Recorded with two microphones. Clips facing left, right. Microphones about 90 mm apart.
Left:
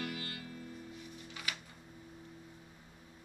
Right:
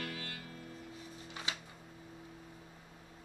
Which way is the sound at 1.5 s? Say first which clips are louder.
Even; 25° right (ahead or behind).